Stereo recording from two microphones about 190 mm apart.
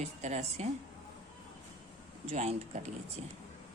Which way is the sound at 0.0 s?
35° right (ahead or behind).